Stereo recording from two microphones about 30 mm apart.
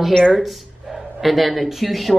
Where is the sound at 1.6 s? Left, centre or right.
Centre.